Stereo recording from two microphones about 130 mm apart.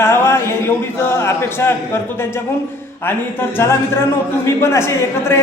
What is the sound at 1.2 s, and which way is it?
Speech, 20° left (ahead or behind).